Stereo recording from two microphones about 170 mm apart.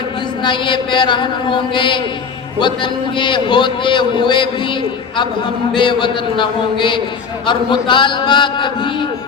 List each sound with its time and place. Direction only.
0.4 s a man's voice: 30° left (ahead or behind)